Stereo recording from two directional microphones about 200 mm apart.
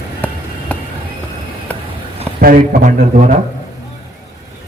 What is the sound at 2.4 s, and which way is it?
A man's voice, 45° right (ahead or behind).